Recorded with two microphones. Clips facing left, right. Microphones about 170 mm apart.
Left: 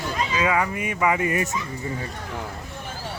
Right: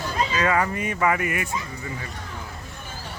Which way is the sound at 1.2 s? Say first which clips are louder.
Left 4 dB; 30° left (ahead or behind).